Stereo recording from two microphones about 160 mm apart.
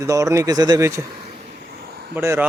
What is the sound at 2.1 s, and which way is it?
Speech, 15° right (ahead or behind).